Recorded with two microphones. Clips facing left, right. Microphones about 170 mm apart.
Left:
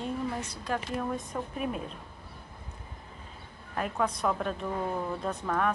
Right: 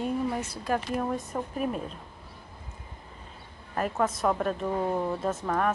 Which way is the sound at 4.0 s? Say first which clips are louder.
Right 3 dB; 5° right (ahead or behind).